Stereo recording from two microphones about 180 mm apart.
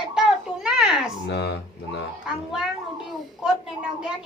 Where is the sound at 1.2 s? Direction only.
70° left (ahead or behind).